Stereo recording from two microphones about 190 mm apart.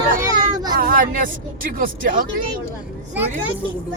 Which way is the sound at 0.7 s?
50° right (ahead or behind).